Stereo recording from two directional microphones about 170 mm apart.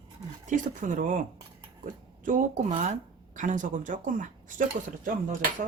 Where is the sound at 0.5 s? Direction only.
50° right (ahead or behind).